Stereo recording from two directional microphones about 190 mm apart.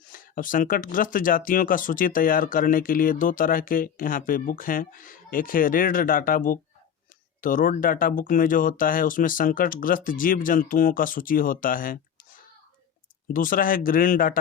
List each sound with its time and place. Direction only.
0.1 s speech: 45° left (ahead or behind)
13.2 s speech: 45° left (ahead or behind)